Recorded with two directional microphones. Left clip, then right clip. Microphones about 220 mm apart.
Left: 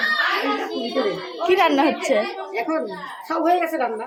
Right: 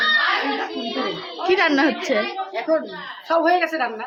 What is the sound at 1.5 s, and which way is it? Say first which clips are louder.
Speech: even; 15° right (ahead or behind).